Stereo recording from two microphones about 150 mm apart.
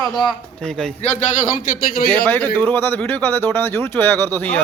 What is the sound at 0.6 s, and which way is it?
Speech, 5° left (ahead or behind).